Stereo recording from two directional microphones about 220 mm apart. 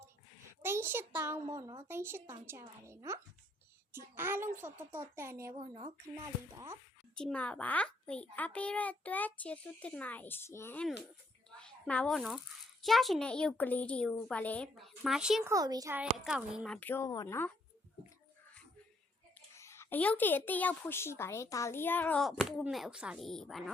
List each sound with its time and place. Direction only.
0.6 s a child's voice: 10° right (ahead or behind)
5.5 s speech: 25° right (ahead or behind)
7.2 s a woman's voice: 5° left (ahead or behind)
11.5 s a sound: 5° left (ahead or behind)
12.8 s a child's voice: centre (ahead or behind)
15.5 s a woman's voice: 15° right (ahead or behind)
16.1 s a woman's voice: 5° right (ahead or behind)
19.5 s a woman's voice: 10° left (ahead or behind)